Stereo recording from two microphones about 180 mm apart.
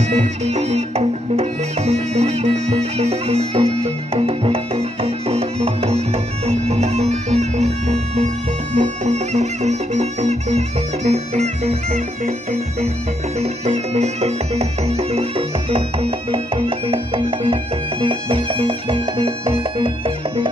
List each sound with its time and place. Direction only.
0.2 s music: 35° right (ahead or behind)
13.4 s music: 35° right (ahead or behind)